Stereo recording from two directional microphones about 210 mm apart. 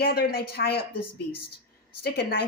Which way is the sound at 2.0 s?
50° left (ahead or behind).